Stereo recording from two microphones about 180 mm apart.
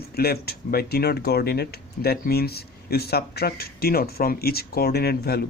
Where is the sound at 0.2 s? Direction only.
60° left (ahead or behind).